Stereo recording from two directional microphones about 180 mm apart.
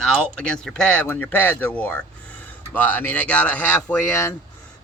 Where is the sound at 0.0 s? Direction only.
5° left (ahead or behind).